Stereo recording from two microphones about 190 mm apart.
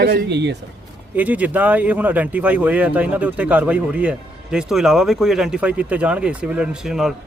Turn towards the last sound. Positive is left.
turn(degrees=0)  # may be behind; listen again after turning